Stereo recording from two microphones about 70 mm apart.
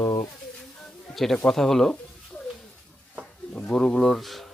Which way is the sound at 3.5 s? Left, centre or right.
Centre.